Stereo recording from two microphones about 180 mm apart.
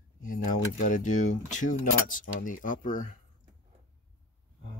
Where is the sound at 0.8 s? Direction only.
45° left (ahead or behind).